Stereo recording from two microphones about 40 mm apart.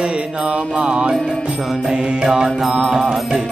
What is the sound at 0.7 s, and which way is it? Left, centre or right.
Mantra, right.